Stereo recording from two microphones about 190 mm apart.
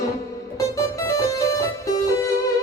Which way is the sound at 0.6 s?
15° left (ahead or behind).